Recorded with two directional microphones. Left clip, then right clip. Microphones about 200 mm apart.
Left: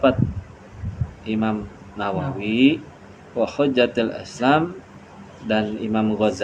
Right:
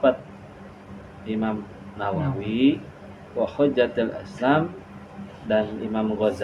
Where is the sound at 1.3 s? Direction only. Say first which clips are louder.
Left 3 dB; 60° left (ahead or behind).